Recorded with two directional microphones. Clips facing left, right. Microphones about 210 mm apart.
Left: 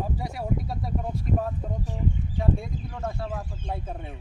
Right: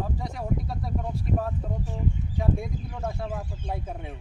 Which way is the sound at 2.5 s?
5° right (ahead or behind).